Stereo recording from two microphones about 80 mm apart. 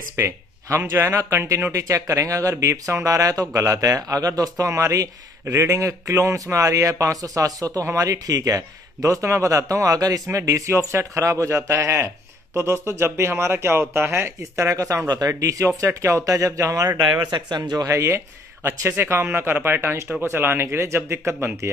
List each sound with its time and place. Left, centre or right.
0.1 s speech: right
15.0 s speech: right
17.3 s speech: right
17.8 s speech: right